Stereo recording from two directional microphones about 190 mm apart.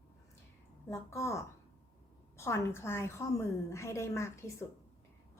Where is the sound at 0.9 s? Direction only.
15° left (ahead or behind).